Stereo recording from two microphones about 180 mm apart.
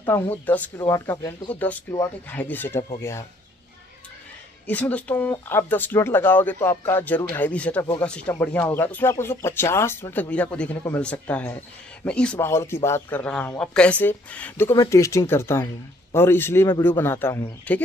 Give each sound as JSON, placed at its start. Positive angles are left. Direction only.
{"t": 0.0, "sound": "speech", "side_deg": 10}
{"t": 4.6, "sound": "speech", "side_deg": 10}